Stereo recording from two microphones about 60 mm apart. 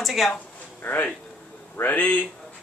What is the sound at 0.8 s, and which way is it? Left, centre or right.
Speech, left.